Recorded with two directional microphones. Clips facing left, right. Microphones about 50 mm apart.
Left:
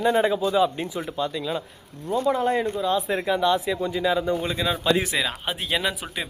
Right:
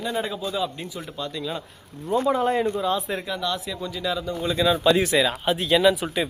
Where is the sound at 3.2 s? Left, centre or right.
Left.